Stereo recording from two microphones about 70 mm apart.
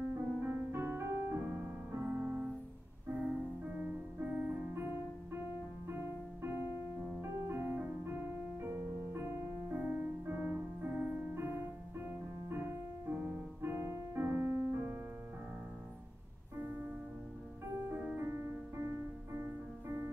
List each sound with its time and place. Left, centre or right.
0.4 s music: right
0.7 s music: right
2.0 s music: right
3.1 s music: right
5.9 s piano: right
7.2 s music: right
9.8 s music: right
11.3 s music: right
14.3 s music: right
17.7 s music: right